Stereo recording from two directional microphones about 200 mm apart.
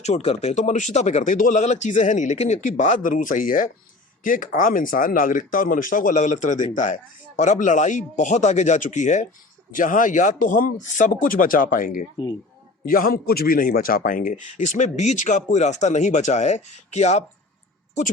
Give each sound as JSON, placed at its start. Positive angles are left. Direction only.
{"t": 0.0, "sound": "a man's voice", "side_deg": 35}